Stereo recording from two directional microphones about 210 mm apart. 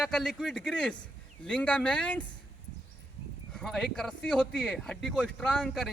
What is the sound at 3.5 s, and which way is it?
Speech, 5° left (ahead or behind).